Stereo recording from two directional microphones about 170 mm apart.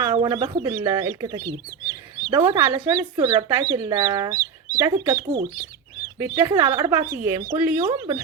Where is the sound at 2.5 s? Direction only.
30° right (ahead or behind).